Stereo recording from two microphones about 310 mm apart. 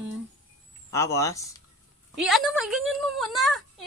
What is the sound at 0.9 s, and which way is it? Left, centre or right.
Speech, centre.